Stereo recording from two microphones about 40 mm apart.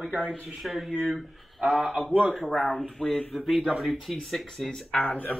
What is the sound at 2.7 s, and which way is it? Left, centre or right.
Speech, centre.